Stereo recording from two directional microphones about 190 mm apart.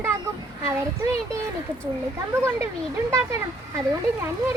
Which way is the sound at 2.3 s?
15° right (ahead or behind).